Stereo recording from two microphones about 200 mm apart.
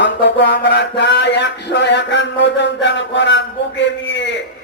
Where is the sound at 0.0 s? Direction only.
60° left (ahead or behind).